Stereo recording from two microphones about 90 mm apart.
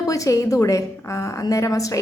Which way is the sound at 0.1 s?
40° left (ahead or behind).